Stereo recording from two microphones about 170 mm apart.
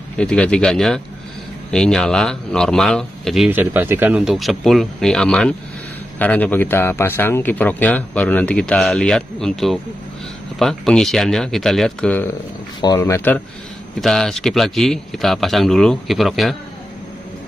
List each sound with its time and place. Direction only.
0.2 s a man's voice: 5° left (ahead or behind)
3.4 s a man's voice: 10° right (ahead or behind); by 12.3 s 5° left (ahead or behind)
12.8 s speech: 15° left (ahead or behind)
14.0 s a man's voice: centre (ahead or behind)